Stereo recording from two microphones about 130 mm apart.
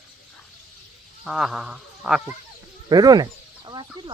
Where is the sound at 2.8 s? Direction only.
30° right (ahead or behind).